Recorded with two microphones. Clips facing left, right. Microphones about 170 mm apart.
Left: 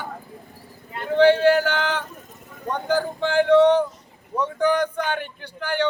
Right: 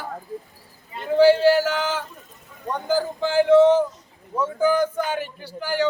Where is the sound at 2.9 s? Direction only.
5° right (ahead or behind).